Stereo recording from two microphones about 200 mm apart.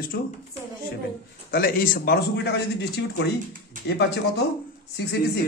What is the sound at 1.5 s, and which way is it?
A man's voice, 45° left (ahead or behind).